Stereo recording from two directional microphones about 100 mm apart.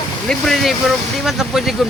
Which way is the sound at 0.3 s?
Centre (ahead or behind).